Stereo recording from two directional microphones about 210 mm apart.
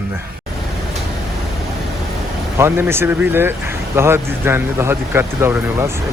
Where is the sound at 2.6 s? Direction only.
10° right (ahead or behind).